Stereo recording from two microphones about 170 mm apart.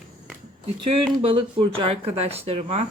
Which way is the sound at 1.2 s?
30° right (ahead or behind).